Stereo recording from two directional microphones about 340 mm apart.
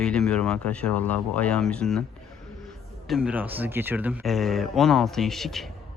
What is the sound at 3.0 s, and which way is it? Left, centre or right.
A man's voice, centre.